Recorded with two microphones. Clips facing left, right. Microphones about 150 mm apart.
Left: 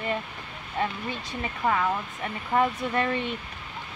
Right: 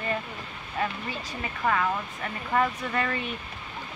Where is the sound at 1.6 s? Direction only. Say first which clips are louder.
Left 1 dB; 15° left (ahead or behind).